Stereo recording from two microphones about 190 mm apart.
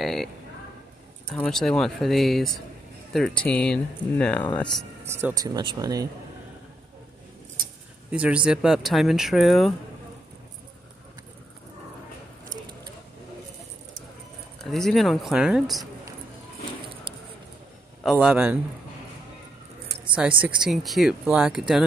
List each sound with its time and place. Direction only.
0.0 s a sound: centre (ahead or behind)
1.2 s speech: 5° left (ahead or behind)
5.0 s speech: 15° right (ahead or behind)
8.1 s speech: 5° right (ahead or behind)
14.6 s speech: centre (ahead or behind)
18.0 s a man's voice: 5° right (ahead or behind)
20.4 s speech: 5° right (ahead or behind)